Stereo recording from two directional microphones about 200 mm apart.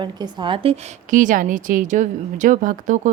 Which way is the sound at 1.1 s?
40° right (ahead or behind).